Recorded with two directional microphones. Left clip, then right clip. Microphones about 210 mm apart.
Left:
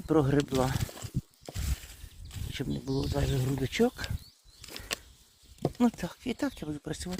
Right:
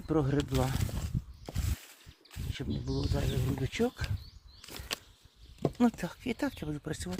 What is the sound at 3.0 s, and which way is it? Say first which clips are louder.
Speech: left 3 dB; 35° left (ahead or behind).